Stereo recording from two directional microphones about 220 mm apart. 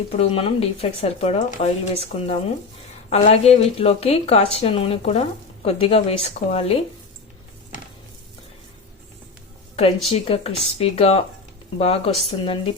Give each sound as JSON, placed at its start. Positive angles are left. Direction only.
{"t": 0.2, "sound": "speech", "side_deg": 25}
{"t": 10.1, "sound": "speech", "side_deg": 25}